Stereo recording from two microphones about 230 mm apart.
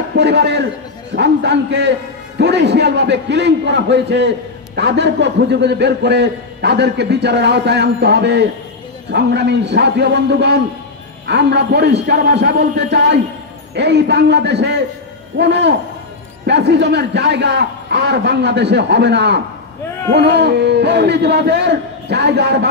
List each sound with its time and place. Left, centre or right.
0.2 s a man's voice: right